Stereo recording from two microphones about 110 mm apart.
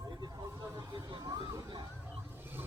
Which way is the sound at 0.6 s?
30° right (ahead or behind).